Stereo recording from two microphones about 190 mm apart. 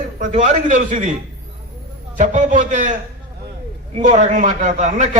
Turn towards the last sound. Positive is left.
turn(degrees=-40)  # may be behind; listen again after turning